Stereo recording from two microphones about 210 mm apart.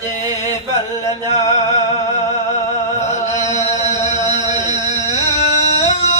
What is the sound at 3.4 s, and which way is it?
Chant, 35° left (ahead or behind).